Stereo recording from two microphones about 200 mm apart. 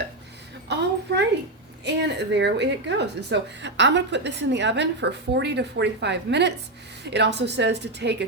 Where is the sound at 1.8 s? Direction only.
60° right (ahead or behind).